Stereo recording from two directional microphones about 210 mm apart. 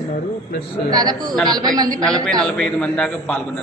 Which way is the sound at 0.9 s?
20° right (ahead or behind).